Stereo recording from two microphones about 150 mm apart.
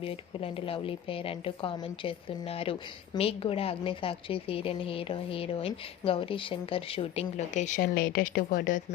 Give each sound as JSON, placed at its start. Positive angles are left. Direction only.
{"t": 0.0, "sound": "a woman's voice", "side_deg": 40}
{"t": 7.8, "sound": "speech", "side_deg": 80}